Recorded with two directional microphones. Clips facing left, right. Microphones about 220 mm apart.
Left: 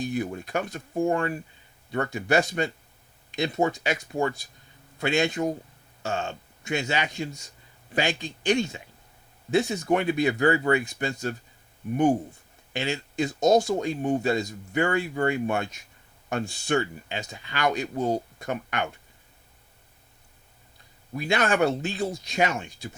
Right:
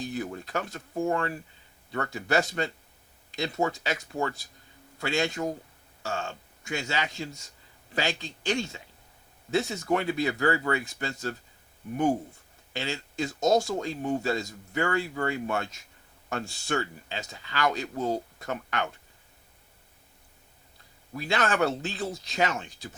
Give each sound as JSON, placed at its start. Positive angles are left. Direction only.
{"t": 0.0, "sound": "a man's voice", "side_deg": 15}
{"t": 12.7, "sound": "speech", "side_deg": 15}
{"t": 21.1, "sound": "speech", "side_deg": 15}